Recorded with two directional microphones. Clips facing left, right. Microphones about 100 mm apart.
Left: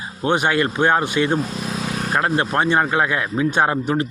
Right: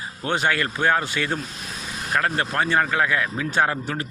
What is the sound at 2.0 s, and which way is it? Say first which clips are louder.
Vehicle: left 2 dB; 30° left (ahead or behind).